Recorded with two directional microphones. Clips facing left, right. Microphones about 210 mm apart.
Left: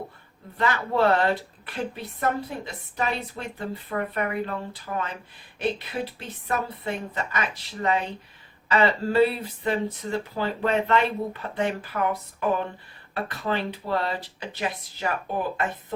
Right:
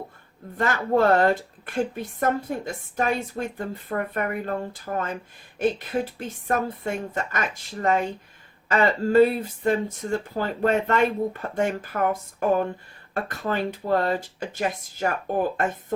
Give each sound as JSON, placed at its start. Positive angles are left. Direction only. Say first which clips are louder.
{"t": 0.5, "sound": "speech", "louder": "right 3 dB", "side_deg": -45}